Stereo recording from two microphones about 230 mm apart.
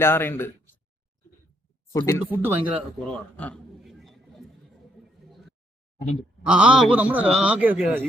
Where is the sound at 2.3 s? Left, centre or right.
Centre.